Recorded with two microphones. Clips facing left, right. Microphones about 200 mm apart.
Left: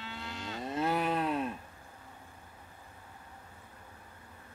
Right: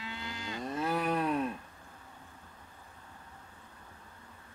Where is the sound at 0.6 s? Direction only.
25° left (ahead or behind).